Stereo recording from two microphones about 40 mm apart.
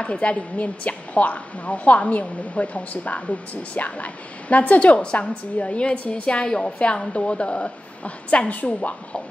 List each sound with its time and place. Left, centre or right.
0.0 s a woman's voice: left